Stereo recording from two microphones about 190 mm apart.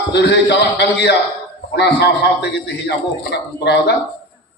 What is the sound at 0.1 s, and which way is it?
Speech, 65° left (ahead or behind).